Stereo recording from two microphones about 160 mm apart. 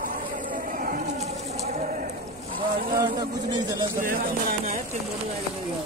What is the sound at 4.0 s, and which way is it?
Speech, 60° right (ahead or behind).